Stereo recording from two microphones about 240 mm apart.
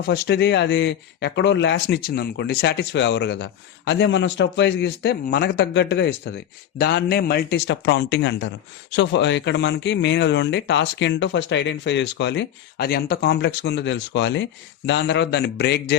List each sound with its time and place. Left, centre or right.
0.0 s speech: left